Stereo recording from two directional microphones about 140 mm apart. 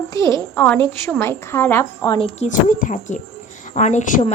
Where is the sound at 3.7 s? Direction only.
60° left (ahead or behind).